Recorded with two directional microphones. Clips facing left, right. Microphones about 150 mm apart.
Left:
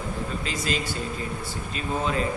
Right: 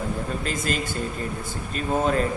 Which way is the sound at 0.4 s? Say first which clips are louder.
Right 1 dB; 50° right (ahead or behind).